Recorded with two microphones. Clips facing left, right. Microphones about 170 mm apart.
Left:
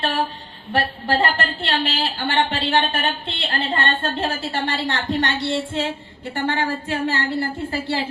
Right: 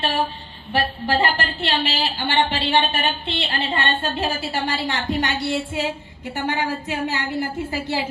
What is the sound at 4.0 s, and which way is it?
A woman's voice, 10° right (ahead or behind).